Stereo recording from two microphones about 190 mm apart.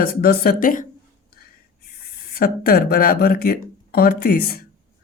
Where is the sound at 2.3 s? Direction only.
50° left (ahead or behind).